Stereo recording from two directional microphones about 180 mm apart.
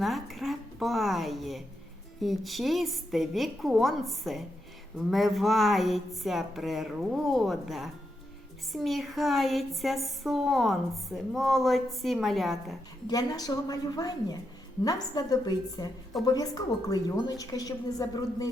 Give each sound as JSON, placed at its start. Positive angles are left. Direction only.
{"t": 0.0, "sound": "a woman's voice", "side_deg": 0}
{"t": 13.1, "sound": "a woman's voice", "side_deg": 20}